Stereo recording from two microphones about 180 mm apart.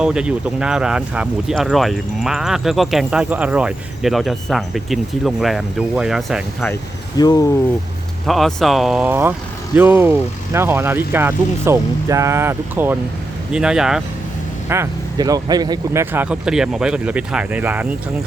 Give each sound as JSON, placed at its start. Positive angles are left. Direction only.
{"t": 0.0, "sound": "speech", "side_deg": -5}
{"t": 7.2, "sound": "speech", "side_deg": 20}
{"t": 8.3, "sound": "speech", "side_deg": 0}
{"t": 14.7, "sound": "speech", "side_deg": -15}